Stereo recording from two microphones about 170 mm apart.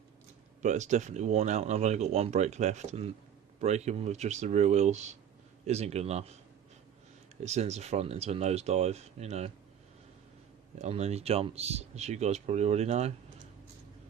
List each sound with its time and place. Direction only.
0.6 s speech: 45° right (ahead or behind)
7.4 s speech: 40° right (ahead or behind)
10.8 s speech: 40° right (ahead or behind)